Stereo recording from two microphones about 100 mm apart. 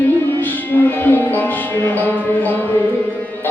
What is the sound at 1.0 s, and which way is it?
Music, 20° left (ahead or behind).